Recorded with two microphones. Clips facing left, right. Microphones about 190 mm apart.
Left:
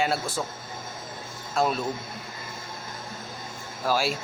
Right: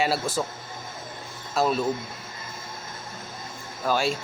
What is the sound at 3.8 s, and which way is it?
Speech, 5° left (ahead or behind).